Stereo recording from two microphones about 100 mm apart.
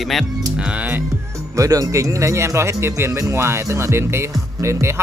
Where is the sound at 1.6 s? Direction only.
35° right (ahead or behind).